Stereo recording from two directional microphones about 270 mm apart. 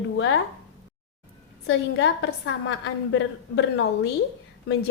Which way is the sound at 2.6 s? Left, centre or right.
Left.